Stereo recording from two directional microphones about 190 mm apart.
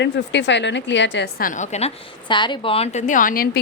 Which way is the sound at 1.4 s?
40° left (ahead or behind).